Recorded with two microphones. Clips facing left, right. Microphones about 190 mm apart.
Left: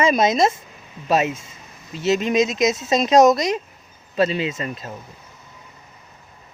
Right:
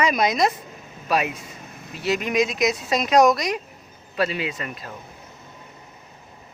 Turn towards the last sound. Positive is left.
turn(degrees=25)  # may be behind; listen again after turning